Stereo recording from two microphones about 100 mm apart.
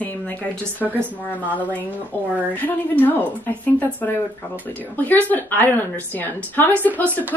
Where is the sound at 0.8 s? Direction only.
15° right (ahead or behind).